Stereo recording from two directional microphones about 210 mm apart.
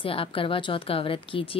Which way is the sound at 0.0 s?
25° left (ahead or behind).